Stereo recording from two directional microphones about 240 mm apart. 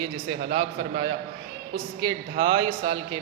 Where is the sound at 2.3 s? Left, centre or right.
Centre.